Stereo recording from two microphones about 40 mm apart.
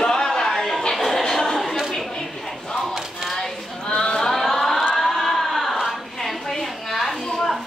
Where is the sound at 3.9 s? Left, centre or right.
Centre.